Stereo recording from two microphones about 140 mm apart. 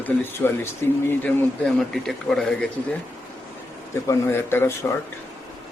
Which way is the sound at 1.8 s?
5° left (ahead or behind).